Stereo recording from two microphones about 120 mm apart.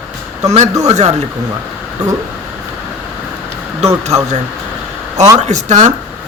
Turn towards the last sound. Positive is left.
turn(degrees=-75)  # may be behind; listen again after turning